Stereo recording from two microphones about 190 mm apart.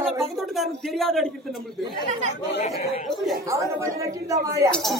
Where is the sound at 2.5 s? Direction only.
35° left (ahead or behind).